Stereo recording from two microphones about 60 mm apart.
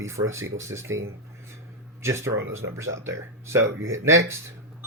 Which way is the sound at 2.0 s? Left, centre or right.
Right.